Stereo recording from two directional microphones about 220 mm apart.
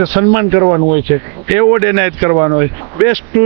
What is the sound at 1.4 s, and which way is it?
Speech, 20° right (ahead or behind).